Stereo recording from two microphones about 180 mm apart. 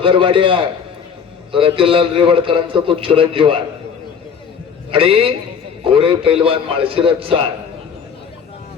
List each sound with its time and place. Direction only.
0.0 s a man's voice: 30° right (ahead or behind)
4.9 s a man's voice: 30° right (ahead or behind)